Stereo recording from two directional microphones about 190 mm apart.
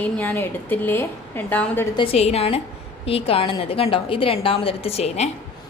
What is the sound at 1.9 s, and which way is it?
A woman's voice, 30° left (ahead or behind).